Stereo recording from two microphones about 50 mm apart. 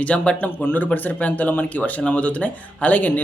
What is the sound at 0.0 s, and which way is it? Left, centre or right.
A man's voice, left.